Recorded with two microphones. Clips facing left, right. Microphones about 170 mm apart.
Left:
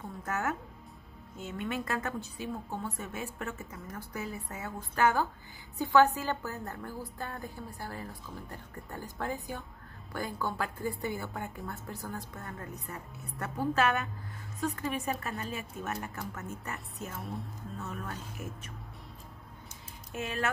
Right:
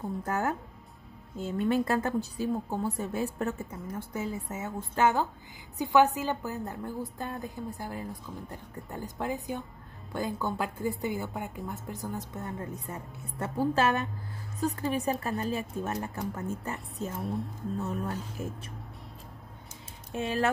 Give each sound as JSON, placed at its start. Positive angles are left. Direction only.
{"t": 0.0, "sound": "a woman's voice", "side_deg": -25}
{"t": 3.7, "sound": "a woman's voice", "side_deg": -25}
{"t": 17.2, "sound": "speech", "side_deg": 0}
{"t": 17.7, "sound": "a woman's voice", "side_deg": -35}
{"t": 20.1, "sound": "speech", "side_deg": -30}